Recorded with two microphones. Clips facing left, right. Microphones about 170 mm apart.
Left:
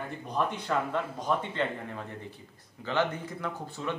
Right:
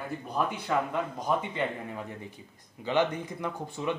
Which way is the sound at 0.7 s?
5° right (ahead or behind).